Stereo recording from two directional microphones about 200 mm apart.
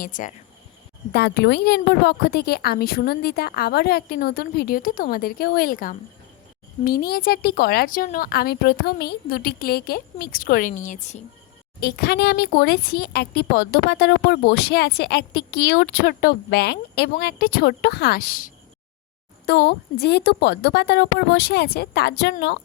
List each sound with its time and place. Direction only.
0.0 s speech: 40° left (ahead or behind)
1.1 s speech: 55° left (ahead or behind); by 11.2 s 40° left (ahead or behind)
11.8 s speech: 50° left (ahead or behind)
19.5 s speech: 55° left (ahead or behind)